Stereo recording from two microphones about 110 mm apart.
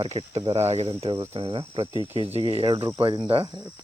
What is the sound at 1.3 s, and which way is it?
Speech, 60° right (ahead or behind).